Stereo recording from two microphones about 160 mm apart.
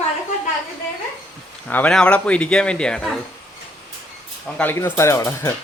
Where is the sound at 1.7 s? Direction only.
10° left (ahead or behind).